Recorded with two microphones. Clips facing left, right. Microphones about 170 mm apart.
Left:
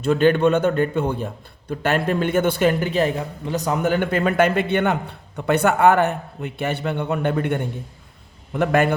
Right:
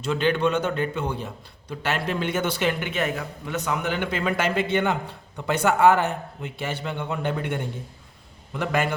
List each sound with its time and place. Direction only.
0.0 s a man's voice: 50° left (ahead or behind)